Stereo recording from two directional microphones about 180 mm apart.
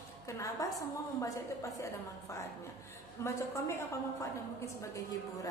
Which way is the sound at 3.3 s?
15° left (ahead or behind).